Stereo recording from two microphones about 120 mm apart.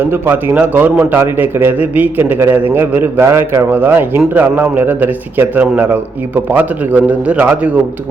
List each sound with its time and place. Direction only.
0.0 s a man's voice: 15° right (ahead or behind)